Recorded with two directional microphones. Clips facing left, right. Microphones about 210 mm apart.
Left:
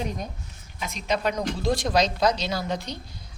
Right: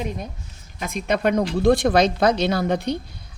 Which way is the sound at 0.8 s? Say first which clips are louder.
Right 5 dB; 55° right (ahead or behind).